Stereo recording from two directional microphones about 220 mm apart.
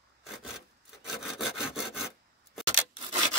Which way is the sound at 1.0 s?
Centre (ahead or behind).